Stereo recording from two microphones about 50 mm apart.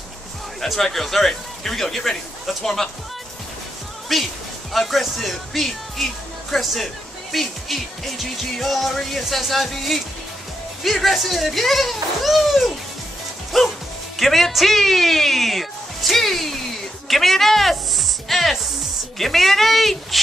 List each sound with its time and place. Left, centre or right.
0.6 s music: centre
4.1 s speech: centre
4.7 s music: centre
10.8 s a child's voice: centre
13.5 s music: centre
14.1 s speech: centre
17.1 s music: centre